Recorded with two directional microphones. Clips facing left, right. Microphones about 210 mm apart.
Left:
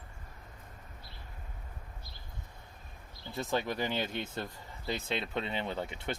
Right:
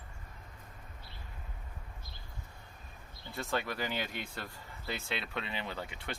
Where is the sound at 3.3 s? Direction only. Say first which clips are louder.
Left 3 dB; 20° left (ahead or behind).